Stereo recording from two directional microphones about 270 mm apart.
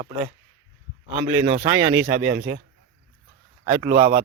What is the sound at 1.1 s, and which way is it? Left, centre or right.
Speech, right.